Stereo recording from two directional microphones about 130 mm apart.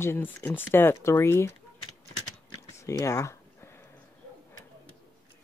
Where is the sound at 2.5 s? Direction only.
25° left (ahead or behind).